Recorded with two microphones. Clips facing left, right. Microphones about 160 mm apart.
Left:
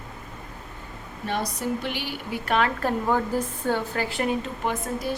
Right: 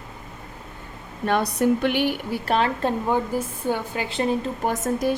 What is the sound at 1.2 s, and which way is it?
Speech, 65° right (ahead or behind).